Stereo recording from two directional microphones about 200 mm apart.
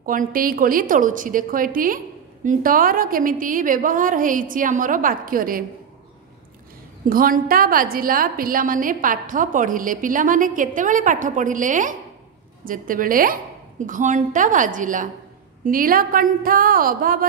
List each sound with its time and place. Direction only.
0.0 s a woman's voice: 45° right (ahead or behind)
7.1 s a woman's voice: 45° right (ahead or behind)